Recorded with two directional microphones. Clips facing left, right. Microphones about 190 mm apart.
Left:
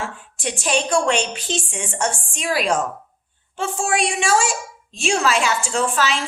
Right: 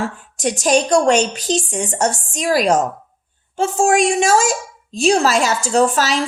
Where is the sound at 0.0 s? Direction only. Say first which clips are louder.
Right 7 dB; 40° right (ahead or behind).